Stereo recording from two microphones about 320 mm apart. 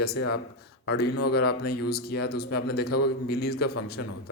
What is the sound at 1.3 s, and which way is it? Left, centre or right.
Speech, left.